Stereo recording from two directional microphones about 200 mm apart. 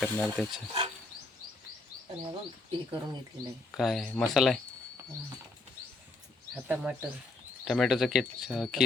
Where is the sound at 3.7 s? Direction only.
Centre (ahead or behind).